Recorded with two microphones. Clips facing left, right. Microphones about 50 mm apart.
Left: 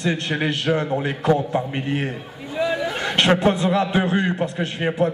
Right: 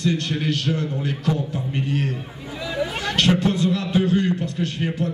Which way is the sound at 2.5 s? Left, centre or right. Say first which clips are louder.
Left 4 dB; left.